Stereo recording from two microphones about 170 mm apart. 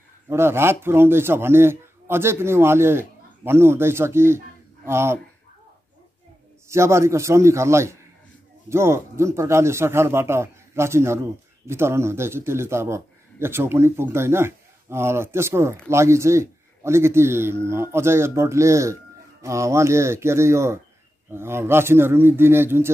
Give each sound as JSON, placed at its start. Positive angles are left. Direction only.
{"t": 0.3, "sound": "a man's voice", "side_deg": -15}
{"t": 6.7, "sound": "a man's voice", "side_deg": -15}